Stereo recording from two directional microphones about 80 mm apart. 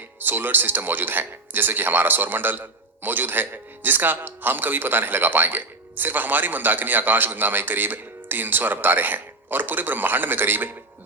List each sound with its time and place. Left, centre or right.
0.2 s speech: right